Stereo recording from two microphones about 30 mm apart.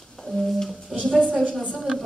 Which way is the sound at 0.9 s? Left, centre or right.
Centre.